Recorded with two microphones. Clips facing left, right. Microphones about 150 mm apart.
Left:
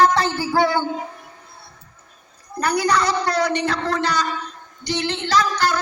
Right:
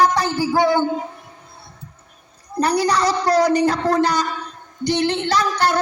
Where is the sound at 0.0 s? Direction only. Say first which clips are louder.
Even; 15° right (ahead or behind).